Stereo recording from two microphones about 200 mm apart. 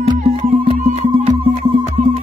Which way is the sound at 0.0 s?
30° right (ahead or behind).